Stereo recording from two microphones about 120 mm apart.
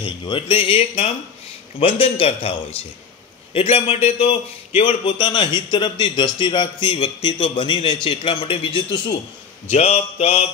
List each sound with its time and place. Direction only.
0.0 s speech: 45° left (ahead or behind)
3.5 s a man's voice: 55° left (ahead or behind)
9.7 s speech: 65° left (ahead or behind)